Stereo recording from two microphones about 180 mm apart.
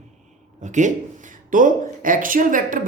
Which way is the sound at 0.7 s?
45° right (ahead or behind).